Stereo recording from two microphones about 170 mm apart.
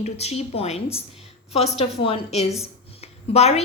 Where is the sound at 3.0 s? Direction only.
40° left (ahead or behind).